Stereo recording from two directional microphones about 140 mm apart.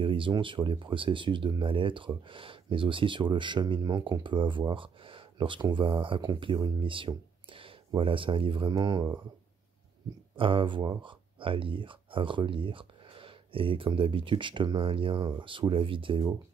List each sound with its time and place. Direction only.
0.0 s speech: 40° right (ahead or behind)
8.7 s speech: 30° right (ahead or behind)
10.3 s speech: 40° right (ahead or behind)